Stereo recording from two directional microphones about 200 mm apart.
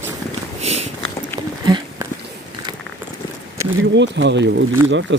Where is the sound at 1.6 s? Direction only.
20° right (ahead or behind).